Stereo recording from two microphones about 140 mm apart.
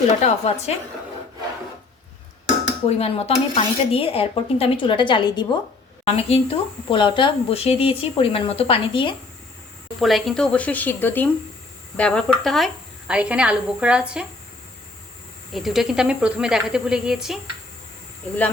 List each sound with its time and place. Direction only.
0.2 s speech: 50° left (ahead or behind)
2.8 s speech: 45° left (ahead or behind)
6.1 s speech: 45° left (ahead or behind)
10.0 s speech: centre (ahead or behind)
15.5 s speech: centre (ahead or behind)